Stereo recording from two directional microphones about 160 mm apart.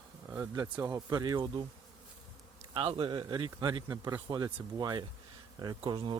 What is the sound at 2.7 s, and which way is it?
Speech, 35° right (ahead or behind).